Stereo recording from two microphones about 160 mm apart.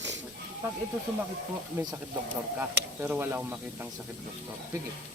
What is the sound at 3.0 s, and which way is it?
Speech, 15° right (ahead or behind).